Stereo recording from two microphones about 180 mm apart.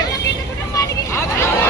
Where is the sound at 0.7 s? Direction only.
15° left (ahead or behind).